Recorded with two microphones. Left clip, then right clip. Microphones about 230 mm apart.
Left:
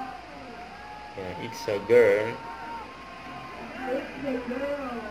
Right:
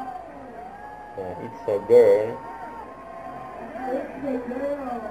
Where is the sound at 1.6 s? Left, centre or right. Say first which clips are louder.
Right 4 dB; left.